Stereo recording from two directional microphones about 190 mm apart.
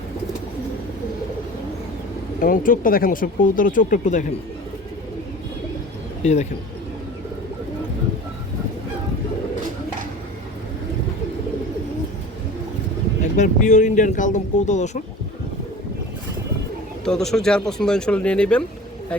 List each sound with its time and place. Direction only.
2.4 s speech: 45° left (ahead or behind)
6.2 s speech: 35° left (ahead or behind)
13.3 s speech: 40° left (ahead or behind)
17.1 s speech: 5° left (ahead or behind)